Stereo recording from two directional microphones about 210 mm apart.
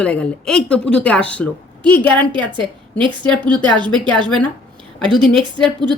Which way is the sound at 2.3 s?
20° right (ahead or behind).